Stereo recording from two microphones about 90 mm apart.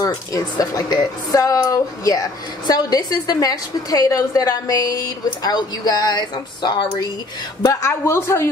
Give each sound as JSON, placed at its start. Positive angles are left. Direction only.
{"t": 0.0, "sound": "speech", "side_deg": 40}
{"t": 7.6, "sound": "a man's voice", "side_deg": 30}